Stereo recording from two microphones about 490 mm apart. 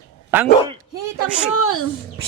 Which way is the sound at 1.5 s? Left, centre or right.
Left.